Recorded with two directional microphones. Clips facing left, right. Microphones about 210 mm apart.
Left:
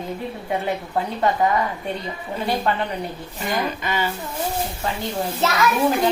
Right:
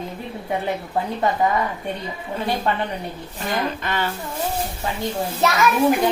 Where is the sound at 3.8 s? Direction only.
5° left (ahead or behind).